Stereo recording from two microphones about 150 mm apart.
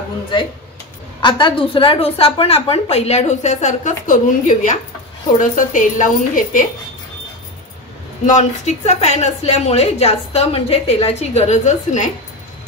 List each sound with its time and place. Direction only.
1.2 s a woman's voice: 35° left (ahead or behind); by 6.6 s 60° left (ahead or behind)
8.3 s a woman's voice: 50° left (ahead or behind)